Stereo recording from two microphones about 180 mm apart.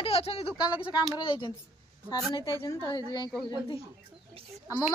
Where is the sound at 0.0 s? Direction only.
35° left (ahead or behind).